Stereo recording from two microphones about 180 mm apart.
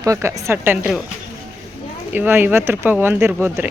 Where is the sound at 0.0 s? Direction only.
15° right (ahead or behind).